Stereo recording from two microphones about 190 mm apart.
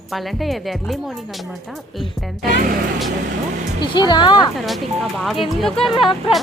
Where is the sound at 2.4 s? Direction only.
50° right (ahead or behind).